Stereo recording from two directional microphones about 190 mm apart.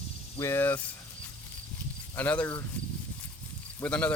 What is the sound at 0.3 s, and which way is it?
Speech, 15° left (ahead or behind).